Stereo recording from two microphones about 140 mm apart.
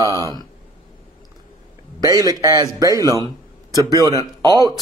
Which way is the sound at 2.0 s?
25° right (ahead or behind).